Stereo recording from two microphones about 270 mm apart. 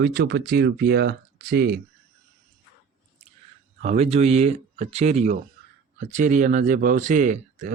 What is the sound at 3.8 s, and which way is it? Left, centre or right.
Speech, right.